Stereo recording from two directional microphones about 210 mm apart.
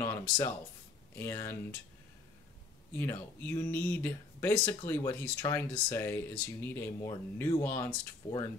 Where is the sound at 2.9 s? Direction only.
10° left (ahead or behind).